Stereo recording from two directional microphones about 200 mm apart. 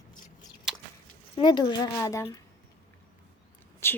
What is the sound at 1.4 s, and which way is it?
Speech, 20° left (ahead or behind).